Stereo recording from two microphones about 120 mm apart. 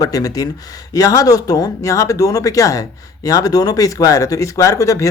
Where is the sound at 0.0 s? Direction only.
30° left (ahead or behind).